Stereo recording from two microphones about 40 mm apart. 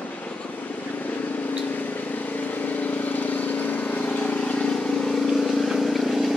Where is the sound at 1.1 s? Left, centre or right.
Left.